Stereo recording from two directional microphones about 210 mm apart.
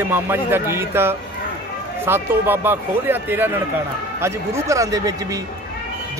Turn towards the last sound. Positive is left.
turn(degrees=-15)  # may be behind; listen again after turning